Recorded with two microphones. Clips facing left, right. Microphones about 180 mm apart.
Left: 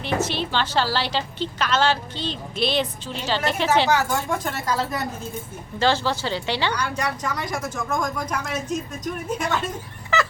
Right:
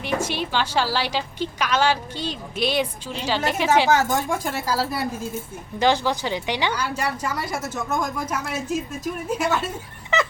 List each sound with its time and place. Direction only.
0.0 s a woman's voice: 10° right (ahead or behind)
3.9 s speech: 20° right (ahead or behind)
4.3 s a woman's voice: 10° right (ahead or behind)